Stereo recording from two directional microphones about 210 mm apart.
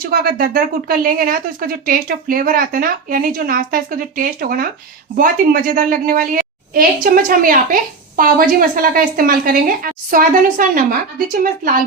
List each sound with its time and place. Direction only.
0.0 s a woman's voice: 45° right (ahead or behind)